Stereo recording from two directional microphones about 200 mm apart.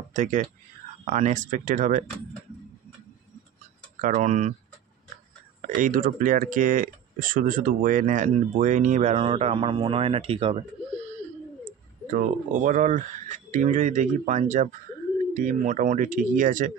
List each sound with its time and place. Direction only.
0.1 s speech: 40° right (ahead or behind)
4.0 s speech: 35° right (ahead or behind)
5.6 s speech: 40° right (ahead or behind)
12.1 s speech: 40° right (ahead or behind)